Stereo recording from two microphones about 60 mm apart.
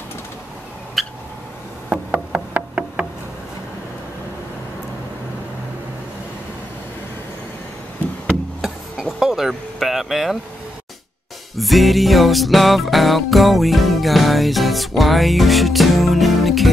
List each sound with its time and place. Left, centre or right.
1.0 s cat: centre
2.1 s wood block: centre
8.5 s a sound: centre
11.5 s music: centre